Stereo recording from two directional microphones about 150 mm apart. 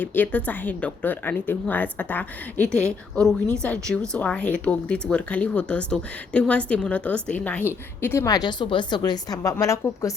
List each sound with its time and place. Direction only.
0.0 s a woman's voice: 15° left (ahead or behind)